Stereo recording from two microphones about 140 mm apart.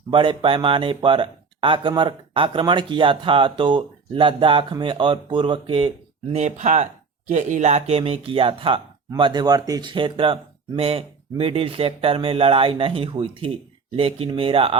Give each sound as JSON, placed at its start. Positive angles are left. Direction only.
{"t": 0.1, "sound": "speech", "side_deg": -35}
{"t": 6.3, "sound": "speech", "side_deg": -55}